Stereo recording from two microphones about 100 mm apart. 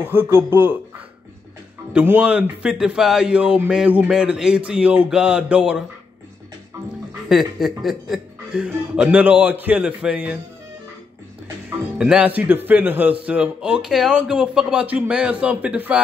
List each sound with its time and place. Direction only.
0.0 s speech: 20° right (ahead or behind)
2.0 s speech: 15° right (ahead or behind)
7.2 s speech: 5° right (ahead or behind)
12.0 s speech: 10° right (ahead or behind)